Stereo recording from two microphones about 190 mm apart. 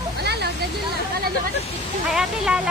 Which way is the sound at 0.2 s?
60° right (ahead or behind).